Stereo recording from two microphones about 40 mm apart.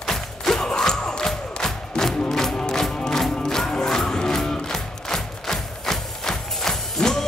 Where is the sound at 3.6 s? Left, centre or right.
Centre.